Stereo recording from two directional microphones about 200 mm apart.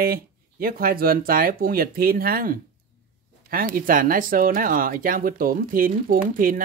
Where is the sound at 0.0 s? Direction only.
45° right (ahead or behind).